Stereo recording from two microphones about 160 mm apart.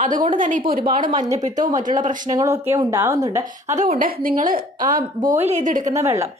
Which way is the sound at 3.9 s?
60° right (ahead or behind).